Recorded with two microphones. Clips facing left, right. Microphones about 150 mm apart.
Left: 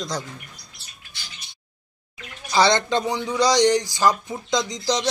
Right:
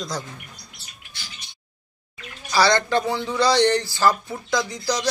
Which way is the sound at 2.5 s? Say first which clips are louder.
Even; 20° left (ahead or behind).